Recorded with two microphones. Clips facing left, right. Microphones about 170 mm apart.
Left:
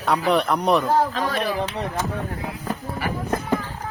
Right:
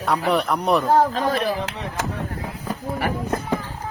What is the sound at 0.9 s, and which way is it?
Speech, 45° right (ahead or behind).